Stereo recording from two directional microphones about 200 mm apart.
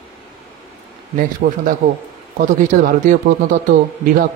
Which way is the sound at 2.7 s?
40° right (ahead or behind).